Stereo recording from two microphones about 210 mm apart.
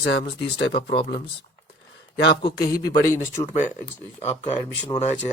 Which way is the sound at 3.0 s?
15° left (ahead or behind).